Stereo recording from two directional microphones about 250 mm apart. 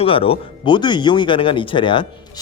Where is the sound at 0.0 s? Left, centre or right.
Left.